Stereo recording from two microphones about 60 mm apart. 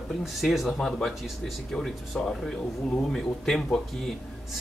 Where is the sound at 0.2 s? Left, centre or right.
Centre.